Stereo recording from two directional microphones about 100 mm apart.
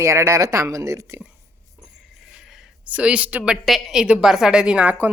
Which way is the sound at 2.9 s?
15° right (ahead or behind).